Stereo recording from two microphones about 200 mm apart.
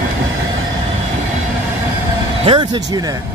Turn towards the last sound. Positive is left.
turn(degrees=-25)  # may be behind; listen again after turning